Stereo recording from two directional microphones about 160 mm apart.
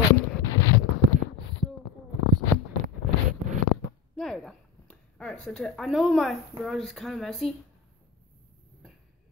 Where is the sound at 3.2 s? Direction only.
50° right (ahead or behind).